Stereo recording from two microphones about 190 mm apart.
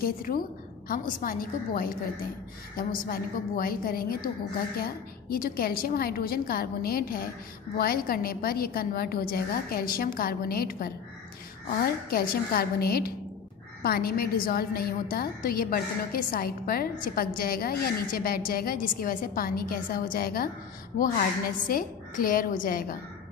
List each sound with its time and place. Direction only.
0.0 s a woman's voice: 50° left (ahead or behind)
21.6 s a woman's voice: 50° left (ahead or behind)